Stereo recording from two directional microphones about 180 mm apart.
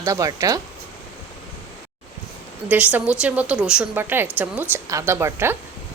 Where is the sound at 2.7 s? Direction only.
10° right (ahead or behind).